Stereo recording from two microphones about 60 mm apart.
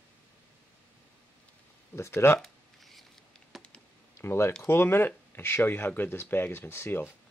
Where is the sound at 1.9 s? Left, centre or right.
Left.